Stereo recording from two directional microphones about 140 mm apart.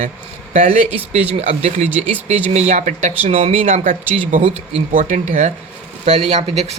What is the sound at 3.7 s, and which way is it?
Speech, 70° right (ahead or behind).